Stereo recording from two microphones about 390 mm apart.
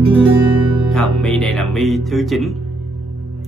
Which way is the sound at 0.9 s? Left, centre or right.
Centre.